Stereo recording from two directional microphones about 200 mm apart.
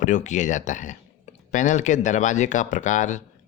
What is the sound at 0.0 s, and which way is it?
Speech, 35° left (ahead or behind).